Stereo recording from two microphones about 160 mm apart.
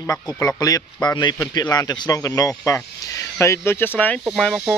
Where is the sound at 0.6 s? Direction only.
20° left (ahead or behind).